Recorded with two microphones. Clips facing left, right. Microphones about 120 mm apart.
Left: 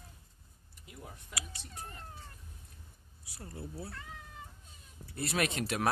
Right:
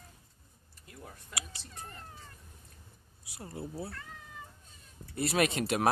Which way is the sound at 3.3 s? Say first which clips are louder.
Right 4 dB; 20° right (ahead or behind).